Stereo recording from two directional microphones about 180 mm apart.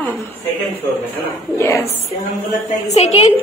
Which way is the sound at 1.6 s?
15° left (ahead or behind).